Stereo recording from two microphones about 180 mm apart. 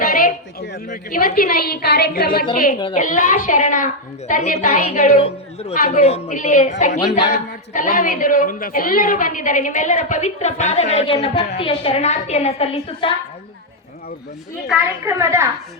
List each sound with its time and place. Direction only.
0.0 s a sound: 50° left (ahead or behind)
0.9 s a woman's voice: 45° left (ahead or behind)
15.0 s a woman's voice: 15° right (ahead or behind)